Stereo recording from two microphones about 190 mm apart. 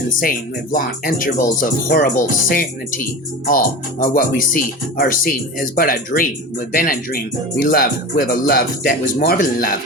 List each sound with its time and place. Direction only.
0.2 s speech: 45° left (ahead or behind)